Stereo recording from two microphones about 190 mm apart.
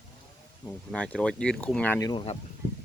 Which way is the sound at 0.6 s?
10° left (ahead or behind).